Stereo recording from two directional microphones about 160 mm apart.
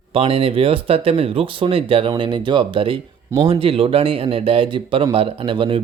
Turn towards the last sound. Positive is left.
turn(degrees=-30)  # may be behind; listen again after turning